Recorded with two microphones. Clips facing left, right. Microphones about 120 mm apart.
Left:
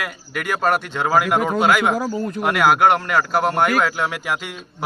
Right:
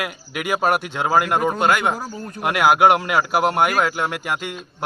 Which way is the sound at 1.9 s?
90° left.